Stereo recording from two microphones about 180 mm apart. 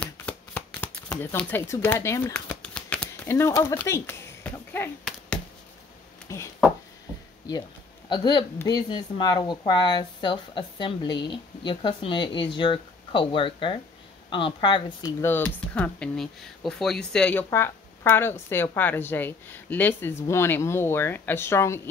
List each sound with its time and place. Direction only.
0.0 s shuffling cards: 10° left (ahead or behind)
6.3 s speech: 15° left (ahead or behind)
8.1 s a woman's voice: 25° left (ahead or behind)
15.0 s speech: 15° left (ahead or behind)